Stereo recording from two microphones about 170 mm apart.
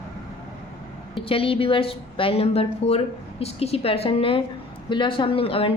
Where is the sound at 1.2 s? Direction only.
35° left (ahead or behind).